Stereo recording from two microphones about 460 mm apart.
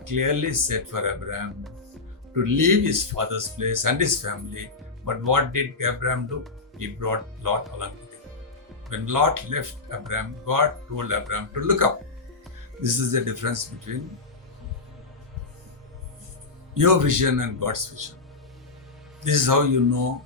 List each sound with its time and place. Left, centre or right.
0.0 s speech: right
8.9 s speech: right
16.7 s speech: right
19.2 s speech: right